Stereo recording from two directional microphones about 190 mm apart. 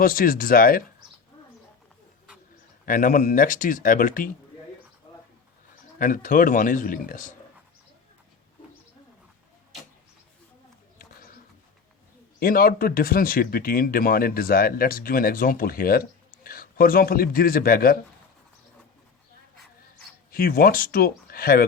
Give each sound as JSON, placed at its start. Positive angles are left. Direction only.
{"t": 0.0, "sound": "speech", "side_deg": 50}
{"t": 2.8, "sound": "speech", "side_deg": 45}
{"t": 6.0, "sound": "speech", "side_deg": 45}
{"t": 10.9, "sound": "a sound", "side_deg": 50}
{"t": 12.4, "sound": "speech", "side_deg": 50}
{"t": 20.3, "sound": "speech", "side_deg": 50}